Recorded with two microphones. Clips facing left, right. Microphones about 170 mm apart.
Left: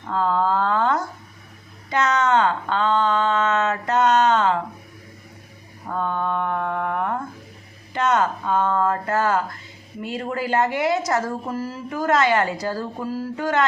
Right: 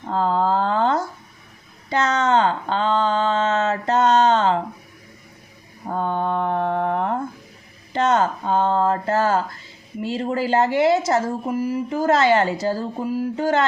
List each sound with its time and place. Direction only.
0.1 s a woman's voice: 30° right (ahead or behind)
1.9 s a sound: 30° right (ahead or behind)
5.9 s mantra: 30° right (ahead or behind)
7.9 s a sound: 30° right (ahead or behind)
10.0 s a woman's voice: 25° right (ahead or behind)
13.3 s a woman's voice: 30° right (ahead or behind)